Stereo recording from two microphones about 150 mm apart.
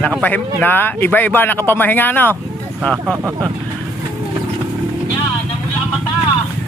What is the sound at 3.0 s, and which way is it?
Speech, 15° right (ahead or behind).